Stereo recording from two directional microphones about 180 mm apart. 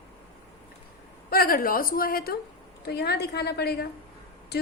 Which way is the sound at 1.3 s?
55° left (ahead or behind).